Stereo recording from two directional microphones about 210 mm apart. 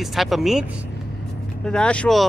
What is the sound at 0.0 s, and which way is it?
Speech, centre (ahead or behind).